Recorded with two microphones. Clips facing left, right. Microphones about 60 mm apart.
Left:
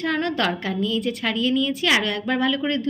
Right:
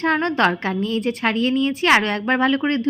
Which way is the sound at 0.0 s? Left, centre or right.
Right.